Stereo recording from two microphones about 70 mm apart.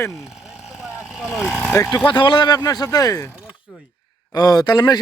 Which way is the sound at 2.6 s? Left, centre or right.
Left.